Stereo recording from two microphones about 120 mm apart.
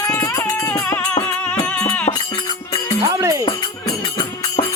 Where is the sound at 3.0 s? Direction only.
25° right (ahead or behind).